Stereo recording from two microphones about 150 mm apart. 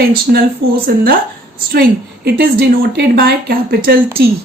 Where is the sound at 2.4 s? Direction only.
90° right.